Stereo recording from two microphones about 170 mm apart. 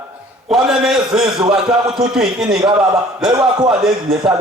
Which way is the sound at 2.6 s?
20° right (ahead or behind).